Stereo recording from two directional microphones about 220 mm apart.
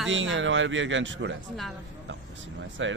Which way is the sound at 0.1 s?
60° right (ahead or behind).